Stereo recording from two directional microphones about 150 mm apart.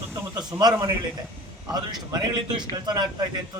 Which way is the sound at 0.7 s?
20° right (ahead or behind).